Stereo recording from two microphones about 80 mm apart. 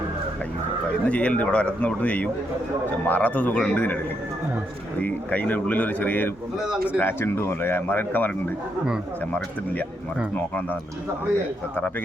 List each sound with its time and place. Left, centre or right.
1.0 s speech: centre
4.9 s speech: centre